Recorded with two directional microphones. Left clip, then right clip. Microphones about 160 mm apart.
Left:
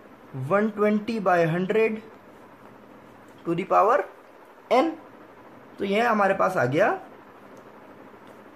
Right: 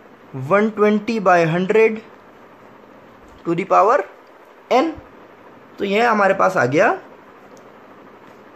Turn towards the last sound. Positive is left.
turn(degrees=-35)  # may be behind; listen again after turning